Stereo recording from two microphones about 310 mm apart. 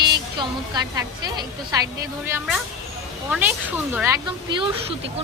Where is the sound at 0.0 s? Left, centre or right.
Centre.